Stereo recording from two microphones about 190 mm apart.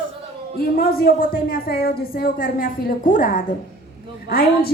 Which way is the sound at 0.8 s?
50° left (ahead or behind).